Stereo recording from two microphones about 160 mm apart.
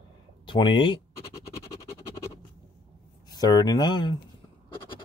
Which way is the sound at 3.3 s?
25° left (ahead or behind).